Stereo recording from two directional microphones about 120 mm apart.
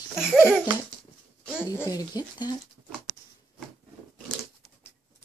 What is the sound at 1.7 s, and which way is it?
Speech, 30° left (ahead or behind).